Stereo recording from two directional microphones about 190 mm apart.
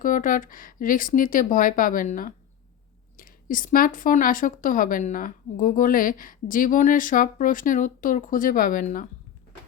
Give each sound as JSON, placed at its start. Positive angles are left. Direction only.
{"t": 0.0, "sound": "a woman's voice", "side_deg": 45}